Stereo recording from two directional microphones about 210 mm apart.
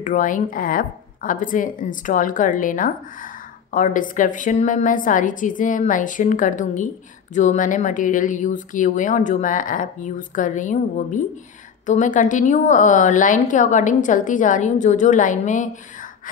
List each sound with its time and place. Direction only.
0.0 s a woman's voice: 40° left (ahead or behind)